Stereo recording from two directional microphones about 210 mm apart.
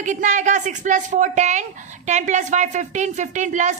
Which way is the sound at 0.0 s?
35° right (ahead or behind).